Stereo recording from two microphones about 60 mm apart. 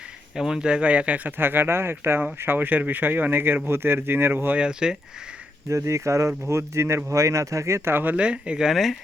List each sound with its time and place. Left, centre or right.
0.3 s speech: centre; by 1.3 s right
1.4 s speech: right
4.5 s speech: centre
5.6 s speech: right
8.1 s speech: centre
8.6 s speech: centre